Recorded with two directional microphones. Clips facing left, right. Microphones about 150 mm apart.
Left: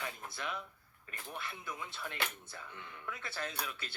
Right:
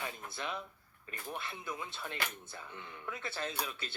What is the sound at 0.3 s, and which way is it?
Speech, 25° right (ahead or behind).